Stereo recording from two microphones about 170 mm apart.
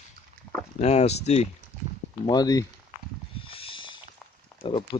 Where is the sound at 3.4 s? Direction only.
30° left (ahead or behind).